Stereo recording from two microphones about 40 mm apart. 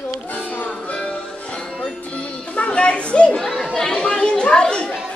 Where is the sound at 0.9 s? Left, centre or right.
Left.